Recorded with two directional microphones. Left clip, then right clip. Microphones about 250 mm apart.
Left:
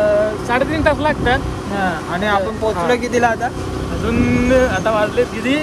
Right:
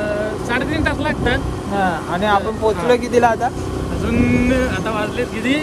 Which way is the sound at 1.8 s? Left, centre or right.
Centre.